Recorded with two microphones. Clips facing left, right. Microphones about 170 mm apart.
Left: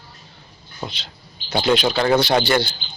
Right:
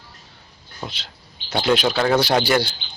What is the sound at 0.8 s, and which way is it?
Speech, centre (ahead or behind).